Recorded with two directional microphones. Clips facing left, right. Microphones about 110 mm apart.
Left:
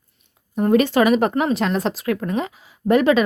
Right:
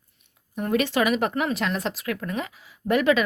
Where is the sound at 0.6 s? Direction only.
35° left (ahead or behind).